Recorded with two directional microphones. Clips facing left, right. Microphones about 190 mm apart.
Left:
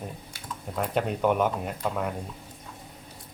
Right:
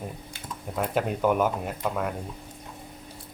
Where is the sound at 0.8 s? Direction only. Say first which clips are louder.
Right 1 dB; centre (ahead or behind).